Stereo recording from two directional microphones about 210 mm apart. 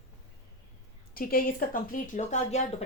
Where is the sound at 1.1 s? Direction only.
45° left (ahead or behind).